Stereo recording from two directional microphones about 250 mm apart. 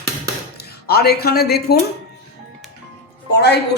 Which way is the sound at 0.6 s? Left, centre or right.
Left.